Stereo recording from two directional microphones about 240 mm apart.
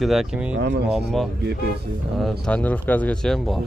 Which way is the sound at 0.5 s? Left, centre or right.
Right.